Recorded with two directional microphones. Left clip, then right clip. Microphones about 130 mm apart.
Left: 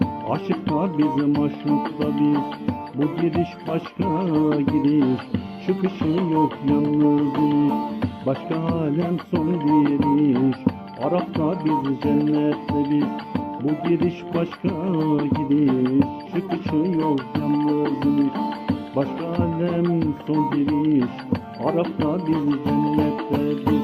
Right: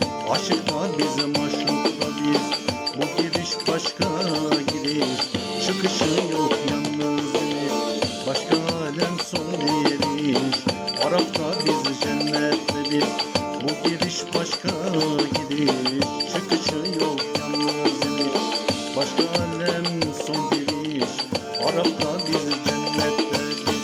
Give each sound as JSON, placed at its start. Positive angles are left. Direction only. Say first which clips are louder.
{"t": 0.5, "sound": "music", "louder": "even", "side_deg": -30}
{"t": 9.8, "sound": "speech", "louder": "left 3 dB", "side_deg": -30}
{"t": 11.2, "sound": "music", "louder": "right 1 dB", "side_deg": -30}
{"t": 14.9, "sound": "music", "louder": "even", "side_deg": -30}